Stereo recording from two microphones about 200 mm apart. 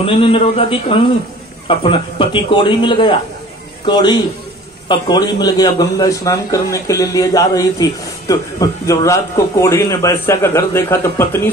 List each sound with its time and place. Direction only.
0.0 s a man's voice: 30° left (ahead or behind); by 11.5 s 10° left (ahead or behind)